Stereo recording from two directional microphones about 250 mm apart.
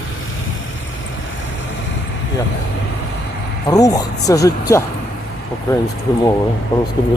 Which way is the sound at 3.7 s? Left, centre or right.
Centre.